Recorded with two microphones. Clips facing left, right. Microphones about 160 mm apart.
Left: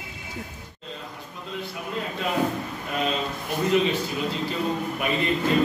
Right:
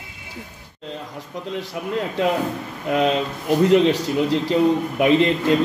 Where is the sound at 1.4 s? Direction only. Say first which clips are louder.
Right 5 dB; 75° right (ahead or behind).